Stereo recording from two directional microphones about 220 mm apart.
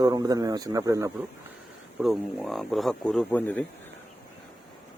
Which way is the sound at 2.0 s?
Centre (ahead or behind).